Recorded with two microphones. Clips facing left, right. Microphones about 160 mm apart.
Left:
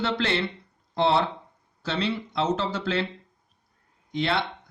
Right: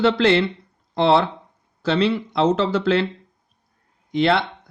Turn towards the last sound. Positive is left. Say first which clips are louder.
# right 8 dB
turn(degrees=-70)  # may be behind; listen again after turning